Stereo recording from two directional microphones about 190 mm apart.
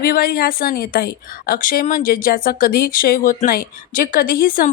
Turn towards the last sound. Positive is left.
turn(degrees=45)  # may be behind; listen again after turning